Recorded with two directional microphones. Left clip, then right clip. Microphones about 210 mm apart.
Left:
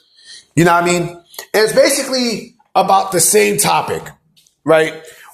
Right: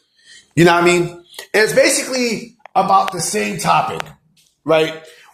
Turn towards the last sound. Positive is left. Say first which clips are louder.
# left 3 dB
turn(degrees=15)  # may be behind; listen again after turning